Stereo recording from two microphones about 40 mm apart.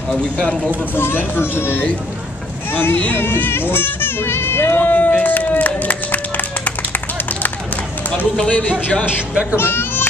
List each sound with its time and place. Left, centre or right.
0.1 s speech: left
0.9 s a child's voice: left
4.9 s music: left
8.5 s speech: left
9.3 s speech: right
9.6 s children playing: left